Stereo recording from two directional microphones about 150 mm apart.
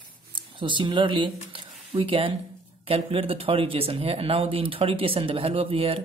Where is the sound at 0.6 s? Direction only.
35° right (ahead or behind).